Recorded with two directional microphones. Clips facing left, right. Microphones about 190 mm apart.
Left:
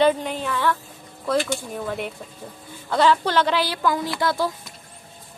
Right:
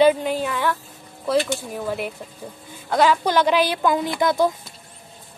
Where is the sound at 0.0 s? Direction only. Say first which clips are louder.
Right 3 dB; 10° right (ahead or behind).